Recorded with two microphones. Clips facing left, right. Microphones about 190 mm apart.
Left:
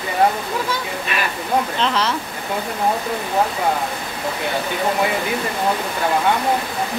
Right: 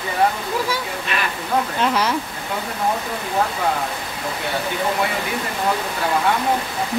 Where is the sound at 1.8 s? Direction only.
10° right (ahead or behind).